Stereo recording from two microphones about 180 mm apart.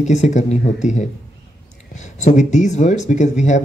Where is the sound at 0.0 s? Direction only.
40° left (ahead or behind).